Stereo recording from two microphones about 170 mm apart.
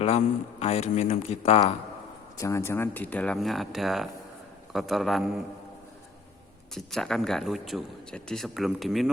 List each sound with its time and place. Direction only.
0.6 s speech: 40° left (ahead or behind)
2.4 s speech: 15° left (ahead or behind); by 5.4 s centre (ahead or behind)
6.7 s speech: centre (ahead or behind)